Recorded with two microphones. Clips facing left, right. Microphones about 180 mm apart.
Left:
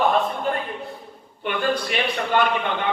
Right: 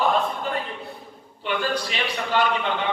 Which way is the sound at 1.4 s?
55° left (ahead or behind).